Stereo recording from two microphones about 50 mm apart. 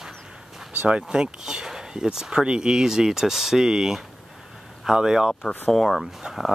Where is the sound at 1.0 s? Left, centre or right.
Centre.